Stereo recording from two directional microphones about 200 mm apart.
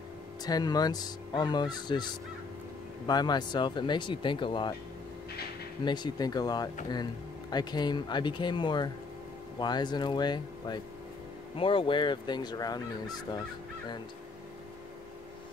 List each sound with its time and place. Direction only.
0.4 s speech: 20° left (ahead or behind)
3.1 s speech: 20° left (ahead or behind)
5.9 s speech: 20° left (ahead or behind)